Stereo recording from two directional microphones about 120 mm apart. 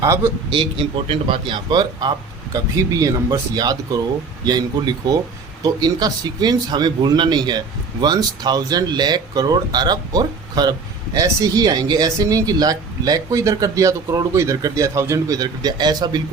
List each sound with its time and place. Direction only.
0.5 s speech: 45° right (ahead or behind)